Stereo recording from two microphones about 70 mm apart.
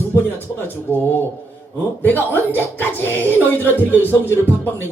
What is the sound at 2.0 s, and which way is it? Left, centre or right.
Speech, left.